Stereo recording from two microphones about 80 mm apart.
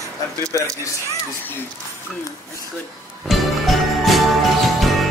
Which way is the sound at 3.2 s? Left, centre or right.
Centre.